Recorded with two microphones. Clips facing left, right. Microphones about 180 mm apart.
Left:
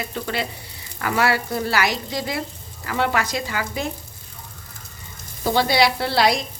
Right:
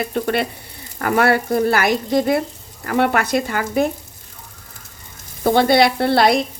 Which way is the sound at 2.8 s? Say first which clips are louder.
Right 5 dB; 50° right (ahead or behind).